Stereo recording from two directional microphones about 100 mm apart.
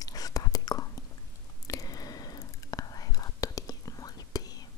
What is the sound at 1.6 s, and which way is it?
Whispering, 35° left (ahead or behind).